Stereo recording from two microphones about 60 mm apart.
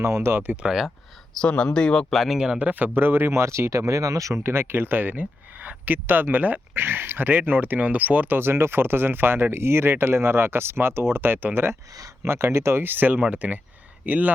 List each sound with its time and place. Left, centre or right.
0.0 s speech: right
0.5 s speech: centre
0.9 s speech: centre
2.1 s speech: centre
2.6 s speech: right
12.8 s speech: right